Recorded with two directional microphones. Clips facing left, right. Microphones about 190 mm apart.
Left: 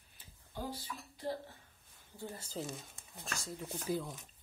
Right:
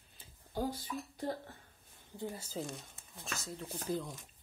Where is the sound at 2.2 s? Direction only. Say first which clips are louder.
Right 2 dB; 10° right (ahead or behind).